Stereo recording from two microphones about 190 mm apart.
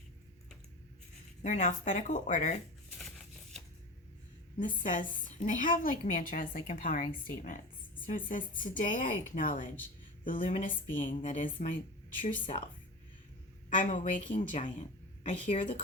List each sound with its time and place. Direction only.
1.4 s speech: 40° left (ahead or behind)
3.0 s a sound: centre (ahead or behind)
4.8 s a woman's voice: 40° left (ahead or behind)
10.3 s a woman's voice: 30° left (ahead or behind)
10.6 s a woman's voice: 45° left (ahead or behind)
13.7 s a woman's voice: 40° left (ahead or behind)